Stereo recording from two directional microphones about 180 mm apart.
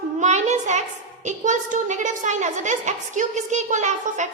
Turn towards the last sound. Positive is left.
turn(degrees=-40)  # may be behind; listen again after turning